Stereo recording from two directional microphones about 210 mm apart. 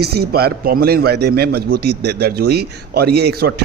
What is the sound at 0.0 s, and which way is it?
A man's voice, 50° right (ahead or behind).